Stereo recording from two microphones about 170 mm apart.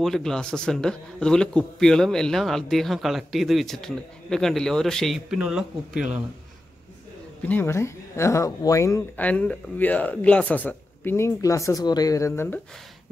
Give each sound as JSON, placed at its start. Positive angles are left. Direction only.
{"t": 0.0, "sound": "speech", "side_deg": 5}
{"t": 7.4, "sound": "speech", "side_deg": 10}